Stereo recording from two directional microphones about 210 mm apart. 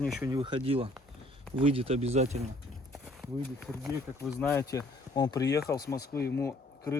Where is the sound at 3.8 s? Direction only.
Centre (ahead or behind).